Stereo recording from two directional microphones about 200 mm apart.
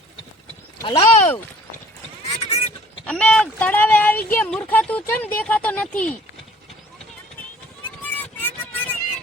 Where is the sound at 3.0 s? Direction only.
5° left (ahead or behind).